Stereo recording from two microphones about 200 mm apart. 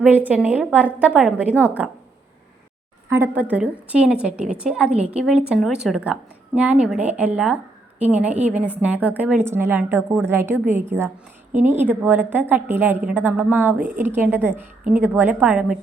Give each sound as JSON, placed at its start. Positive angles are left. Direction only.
{"t": 0.3, "sound": "a woman's voice", "side_deg": -5}
{"t": 3.1, "sound": "a woman's voice", "side_deg": -10}